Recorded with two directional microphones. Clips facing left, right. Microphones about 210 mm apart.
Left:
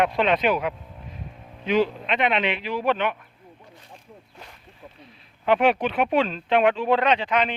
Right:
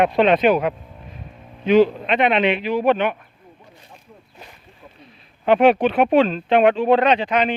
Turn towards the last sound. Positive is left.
turn(degrees=-50)  # may be behind; listen again after turning